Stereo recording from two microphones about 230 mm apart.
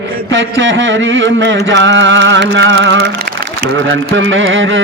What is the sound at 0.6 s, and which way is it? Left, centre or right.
Carnatic music, right.